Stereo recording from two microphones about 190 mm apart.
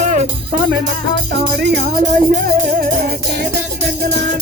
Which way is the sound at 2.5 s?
50° right (ahead or behind).